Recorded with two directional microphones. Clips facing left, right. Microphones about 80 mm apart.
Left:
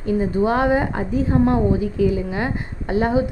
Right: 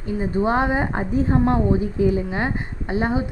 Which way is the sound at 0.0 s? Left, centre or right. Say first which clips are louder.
Left 3 dB; right.